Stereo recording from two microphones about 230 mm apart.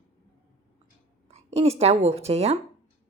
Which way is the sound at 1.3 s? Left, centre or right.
Right.